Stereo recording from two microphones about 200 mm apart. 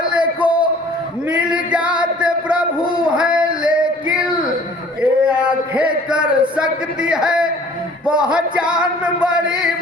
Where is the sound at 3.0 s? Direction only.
5° right (ahead or behind).